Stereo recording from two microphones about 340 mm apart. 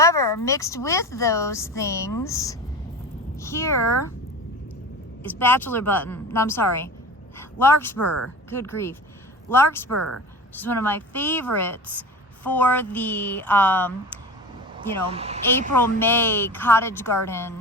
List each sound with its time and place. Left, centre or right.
0.0 s speech: centre
5.2 s a woman's voice: centre
15.0 s speech: centre
15.8 s speech: centre